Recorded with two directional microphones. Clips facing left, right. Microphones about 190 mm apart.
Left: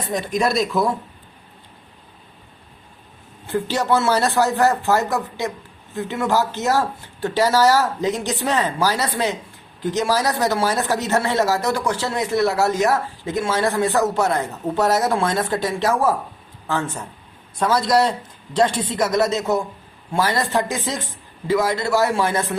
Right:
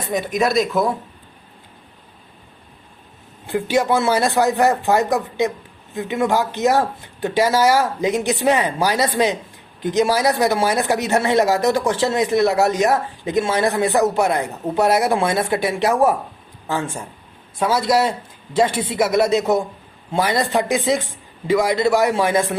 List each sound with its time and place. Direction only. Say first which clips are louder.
0.1 s speech: right 2 dB; 5° right (ahead or behind)
3.4 s speech: right 3 dB; 15° right (ahead or behind)